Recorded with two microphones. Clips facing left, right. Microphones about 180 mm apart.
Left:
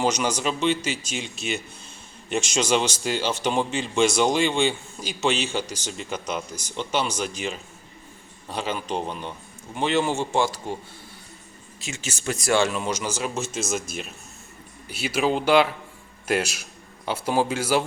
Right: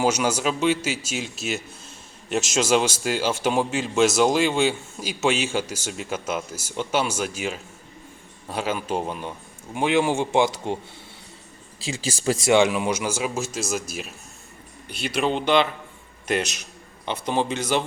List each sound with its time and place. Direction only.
0.0 s a man's voice: 5° right (ahead or behind)
11.8 s speech: 30° right (ahead or behind)
12.5 s a man's voice: 15° right (ahead or behind); by 17.8 s 5° left (ahead or behind)